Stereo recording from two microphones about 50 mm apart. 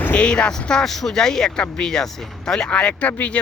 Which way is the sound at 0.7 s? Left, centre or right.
Centre.